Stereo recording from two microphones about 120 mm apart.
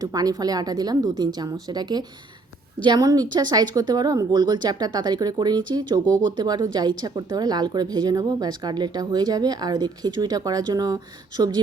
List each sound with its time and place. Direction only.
0.0 s speech: 30° right (ahead or behind)